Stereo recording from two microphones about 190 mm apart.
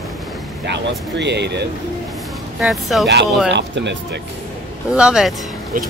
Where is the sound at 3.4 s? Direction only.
65° right (ahead or behind).